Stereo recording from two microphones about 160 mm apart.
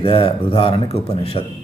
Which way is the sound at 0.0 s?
35° left (ahead or behind).